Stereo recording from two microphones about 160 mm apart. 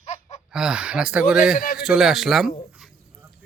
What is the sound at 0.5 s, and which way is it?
Speech, 5° right (ahead or behind).